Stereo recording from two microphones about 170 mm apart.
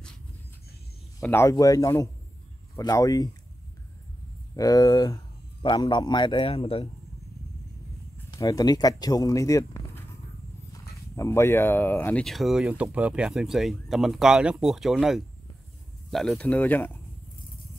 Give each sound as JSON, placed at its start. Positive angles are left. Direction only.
{"t": 1.2, "sound": "a man's voice", "side_deg": 15}
{"t": 4.6, "sound": "a man's voice", "side_deg": 20}
{"t": 8.3, "sound": "speech", "side_deg": 20}